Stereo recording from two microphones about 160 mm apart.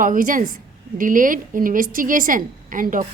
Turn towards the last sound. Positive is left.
turn(degrees=-55)  # may be behind; listen again after turning